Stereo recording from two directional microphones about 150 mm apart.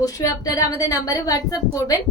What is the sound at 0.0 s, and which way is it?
A woman's voice, 25° left (ahead or behind).